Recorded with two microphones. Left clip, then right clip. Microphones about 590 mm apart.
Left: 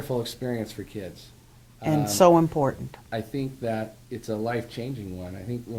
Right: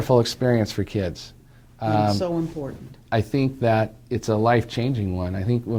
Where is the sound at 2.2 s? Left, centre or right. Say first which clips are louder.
Left 10 dB; left.